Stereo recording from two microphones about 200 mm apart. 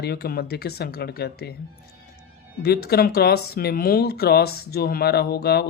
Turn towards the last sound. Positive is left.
turn(degrees=55)  # may be behind; listen again after turning